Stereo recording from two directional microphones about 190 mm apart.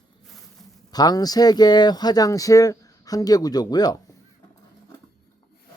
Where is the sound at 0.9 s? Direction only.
20° left (ahead or behind).